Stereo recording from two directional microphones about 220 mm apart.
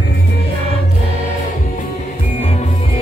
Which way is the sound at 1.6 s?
35° left (ahead or behind).